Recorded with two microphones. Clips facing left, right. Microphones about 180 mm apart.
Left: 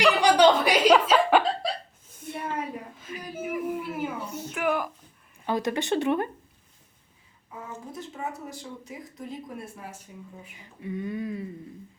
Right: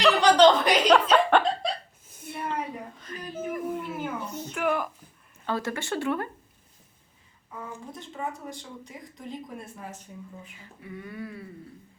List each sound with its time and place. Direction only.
0.0 s chuckle: 10° left (ahead or behind)
3.0 s a sound: 10° left (ahead or behind)
5.5 s speech: 15° left (ahead or behind)
7.9 s speech: 5° left (ahead or behind)
10.6 s speech: 25° left (ahead or behind)